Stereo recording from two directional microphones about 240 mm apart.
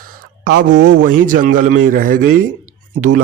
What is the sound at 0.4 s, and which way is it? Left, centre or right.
Speech, right.